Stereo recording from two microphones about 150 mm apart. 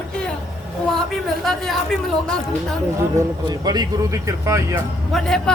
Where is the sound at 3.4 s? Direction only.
25° right (ahead or behind).